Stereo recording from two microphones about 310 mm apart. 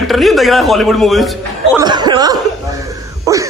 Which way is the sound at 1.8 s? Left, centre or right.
Centre.